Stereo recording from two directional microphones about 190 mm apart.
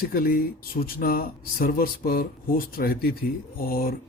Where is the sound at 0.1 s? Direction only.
50° left (ahead or behind).